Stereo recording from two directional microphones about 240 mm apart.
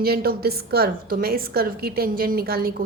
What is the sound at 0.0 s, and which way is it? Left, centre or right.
A woman's voice, right.